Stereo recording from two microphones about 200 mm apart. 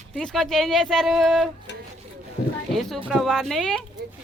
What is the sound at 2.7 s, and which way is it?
Speech, centre (ahead or behind).